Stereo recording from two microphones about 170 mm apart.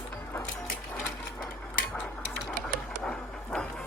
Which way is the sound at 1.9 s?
5° left (ahead or behind).